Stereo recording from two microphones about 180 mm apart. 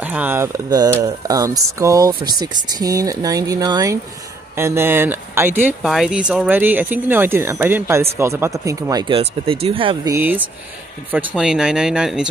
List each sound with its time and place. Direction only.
0.0 s speech: 10° right (ahead or behind)
9.1 s speech: 30° right (ahead or behind)
10.1 s speech: 10° right (ahead or behind)